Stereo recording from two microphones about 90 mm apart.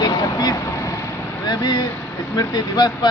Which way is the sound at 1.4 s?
50° left (ahead or behind).